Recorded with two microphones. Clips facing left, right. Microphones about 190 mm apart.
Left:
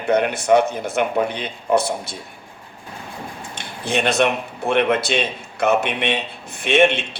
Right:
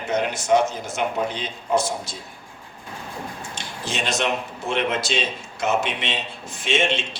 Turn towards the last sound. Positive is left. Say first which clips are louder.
# left 6 dB
turn(degrees=60)  # may be behind; listen again after turning